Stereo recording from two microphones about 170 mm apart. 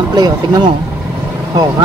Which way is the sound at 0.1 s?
25° right (ahead or behind).